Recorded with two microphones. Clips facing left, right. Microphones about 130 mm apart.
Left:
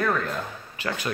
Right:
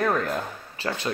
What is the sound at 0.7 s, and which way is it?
Speech, 25° right (ahead or behind).